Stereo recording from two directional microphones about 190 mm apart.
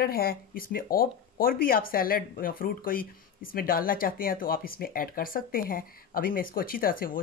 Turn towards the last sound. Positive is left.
turn(degrees=50)  # may be behind; listen again after turning